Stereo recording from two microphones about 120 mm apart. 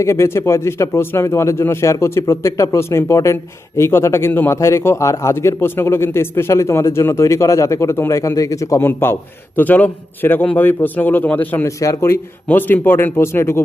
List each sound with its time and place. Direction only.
0.0 s a man's voice: 25° left (ahead or behind)
11.8 s speech: 25° left (ahead or behind)